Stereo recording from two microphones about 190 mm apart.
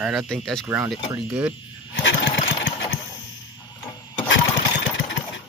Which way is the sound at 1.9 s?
70° left (ahead or behind).